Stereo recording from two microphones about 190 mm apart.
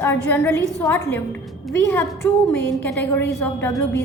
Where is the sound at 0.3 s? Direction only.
10° left (ahead or behind).